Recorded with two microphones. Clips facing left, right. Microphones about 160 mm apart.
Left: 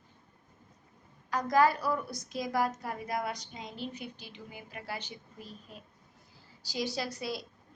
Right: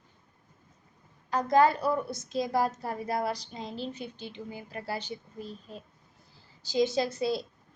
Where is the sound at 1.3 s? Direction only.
25° right (ahead or behind).